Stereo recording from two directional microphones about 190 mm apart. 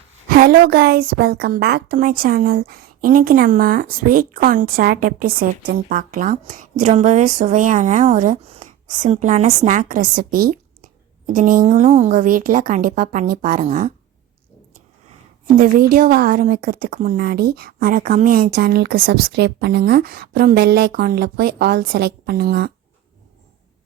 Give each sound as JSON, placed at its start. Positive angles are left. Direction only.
{"t": 0.3, "sound": "a woman's voice", "side_deg": -50}
{"t": 15.4, "sound": "a woman's voice", "side_deg": -45}